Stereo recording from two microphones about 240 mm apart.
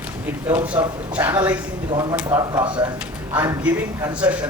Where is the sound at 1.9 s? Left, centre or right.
Centre.